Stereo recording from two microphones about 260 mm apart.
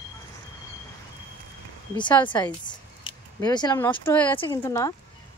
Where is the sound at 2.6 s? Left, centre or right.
Centre.